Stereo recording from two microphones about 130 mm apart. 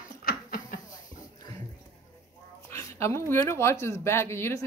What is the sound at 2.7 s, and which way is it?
Speech, 20° left (ahead or behind).